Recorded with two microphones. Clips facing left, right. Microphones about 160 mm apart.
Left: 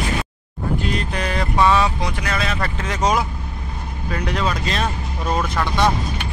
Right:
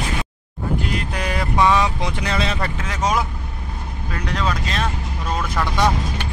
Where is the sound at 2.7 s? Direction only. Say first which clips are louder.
Left 3 dB; centre (ahead or behind).